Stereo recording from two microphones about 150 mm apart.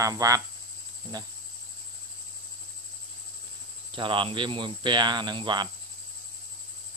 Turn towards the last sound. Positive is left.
turn(degrees=-30)  # may be behind; listen again after turning